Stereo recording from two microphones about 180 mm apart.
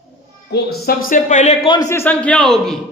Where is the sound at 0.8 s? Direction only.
55° left (ahead or behind).